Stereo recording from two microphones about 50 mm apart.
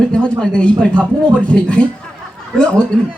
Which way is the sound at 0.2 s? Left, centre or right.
Centre.